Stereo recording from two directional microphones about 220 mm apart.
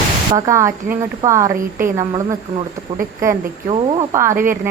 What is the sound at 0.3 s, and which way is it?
Speech, 15° right (ahead or behind).